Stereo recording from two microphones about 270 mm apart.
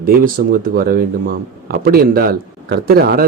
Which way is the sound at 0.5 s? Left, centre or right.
Right.